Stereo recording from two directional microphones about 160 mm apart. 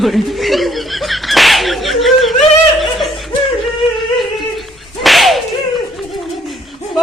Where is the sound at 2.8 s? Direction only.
Centre (ahead or behind).